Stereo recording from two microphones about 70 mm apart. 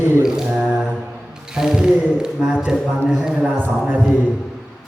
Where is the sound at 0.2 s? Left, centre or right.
Centre.